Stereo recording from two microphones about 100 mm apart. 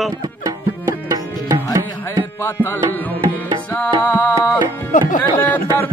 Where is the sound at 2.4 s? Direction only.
20° left (ahead or behind).